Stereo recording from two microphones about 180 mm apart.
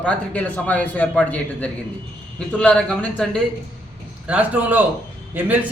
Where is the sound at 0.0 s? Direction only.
10° left (ahead or behind).